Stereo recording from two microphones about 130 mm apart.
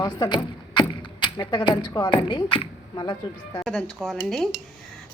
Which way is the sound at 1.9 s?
35° left (ahead or behind).